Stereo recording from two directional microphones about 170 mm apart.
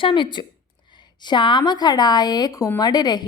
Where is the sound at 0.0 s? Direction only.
30° left (ahead or behind).